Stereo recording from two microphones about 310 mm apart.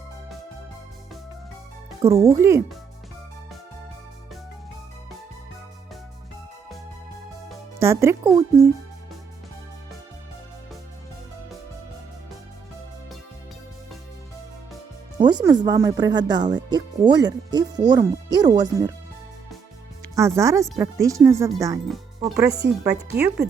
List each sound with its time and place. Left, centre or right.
2.0 s speech: centre
7.8 s speech: centre
15.2 s speech: centre
20.1 s speech: centre